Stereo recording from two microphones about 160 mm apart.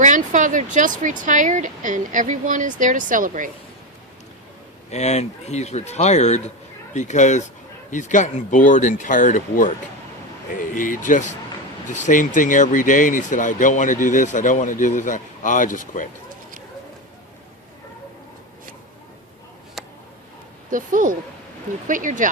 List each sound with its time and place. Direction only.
0.0 s speech: 50° right (ahead or behind)
4.9 s speech: 45° left (ahead or behind)
19.8 s a sound: centre (ahead or behind)
20.7 s speech: 55° right (ahead or behind)